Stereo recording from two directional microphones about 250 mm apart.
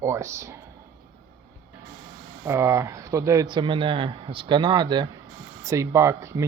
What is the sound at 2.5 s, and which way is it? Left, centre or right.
Speech, centre.